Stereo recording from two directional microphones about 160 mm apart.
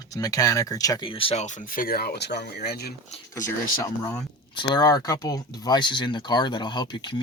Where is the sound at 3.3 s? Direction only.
20° left (ahead or behind).